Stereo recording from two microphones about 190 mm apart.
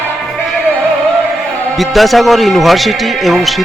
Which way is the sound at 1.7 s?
Centre (ahead or behind).